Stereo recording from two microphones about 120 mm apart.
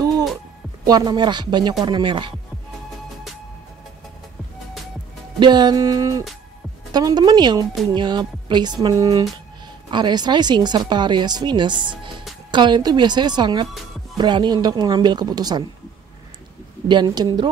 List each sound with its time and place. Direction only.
0.8 s speech: 35° right (ahead or behind)
5.4 s a sound: 35° right (ahead or behind)
6.9 s speech: 35° right (ahead or behind)
9.8 s speech: 40° right (ahead or behind)
16.8 s speech: 40° right (ahead or behind)